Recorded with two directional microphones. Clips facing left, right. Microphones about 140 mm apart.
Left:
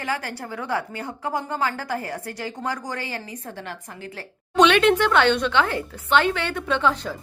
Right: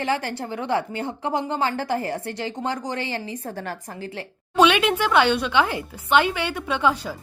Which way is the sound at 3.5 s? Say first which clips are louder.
Right 4 dB; 40° right (ahead or behind).